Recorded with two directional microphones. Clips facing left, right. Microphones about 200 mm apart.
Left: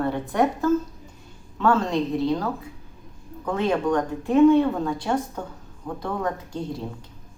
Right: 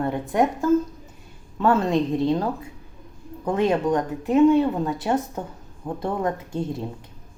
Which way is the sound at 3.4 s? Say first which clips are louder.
Right 2 dB; 20° right (ahead or behind).